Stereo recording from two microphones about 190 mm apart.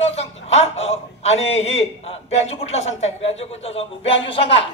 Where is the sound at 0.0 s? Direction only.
35° left (ahead or behind).